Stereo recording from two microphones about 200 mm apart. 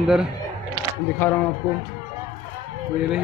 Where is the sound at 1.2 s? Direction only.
10° left (ahead or behind).